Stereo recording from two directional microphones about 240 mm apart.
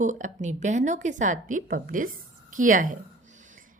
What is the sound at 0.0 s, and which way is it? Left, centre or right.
A woman's voice, right.